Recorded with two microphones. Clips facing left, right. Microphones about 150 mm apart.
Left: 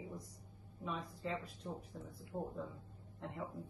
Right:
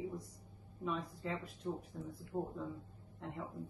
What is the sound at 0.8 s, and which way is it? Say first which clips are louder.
Speech: right 3 dB; centre (ahead or behind).